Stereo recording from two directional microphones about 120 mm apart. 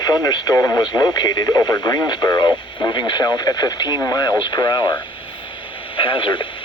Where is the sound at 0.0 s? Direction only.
35° left (ahead or behind).